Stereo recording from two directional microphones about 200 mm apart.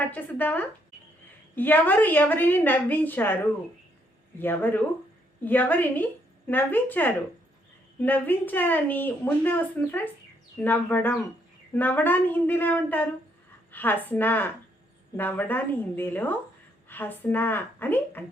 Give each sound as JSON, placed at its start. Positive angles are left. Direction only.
{"t": 0.1, "sound": "a woman's voice", "side_deg": 10}